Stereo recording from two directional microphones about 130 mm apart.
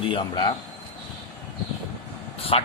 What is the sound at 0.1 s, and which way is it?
Speech, 40° left (ahead or behind).